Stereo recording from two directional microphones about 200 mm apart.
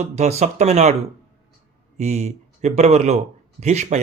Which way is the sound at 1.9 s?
35° right (ahead or behind).